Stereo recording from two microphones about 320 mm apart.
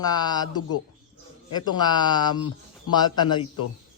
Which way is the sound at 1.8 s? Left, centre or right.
Centre.